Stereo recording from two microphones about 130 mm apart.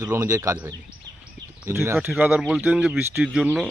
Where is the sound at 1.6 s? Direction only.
20° right (ahead or behind).